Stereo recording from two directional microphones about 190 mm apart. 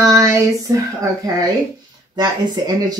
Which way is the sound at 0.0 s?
15° right (ahead or behind).